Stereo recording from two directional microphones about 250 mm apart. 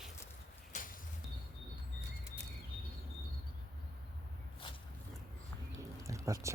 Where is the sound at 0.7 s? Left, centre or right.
Left.